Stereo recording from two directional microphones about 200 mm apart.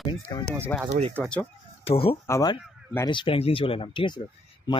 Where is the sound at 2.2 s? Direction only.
15° left (ahead or behind).